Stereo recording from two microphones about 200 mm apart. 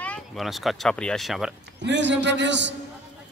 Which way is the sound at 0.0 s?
Centre (ahead or behind).